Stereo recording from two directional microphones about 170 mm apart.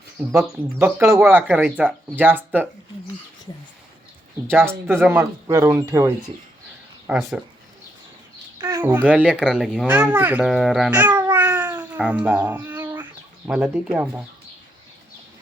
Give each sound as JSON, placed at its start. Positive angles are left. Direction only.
{"t": 0.8, "sound": "speech", "side_deg": -15}
{"t": 4.4, "sound": "speech", "side_deg": -15}
{"t": 8.8, "sound": "speech", "side_deg": -10}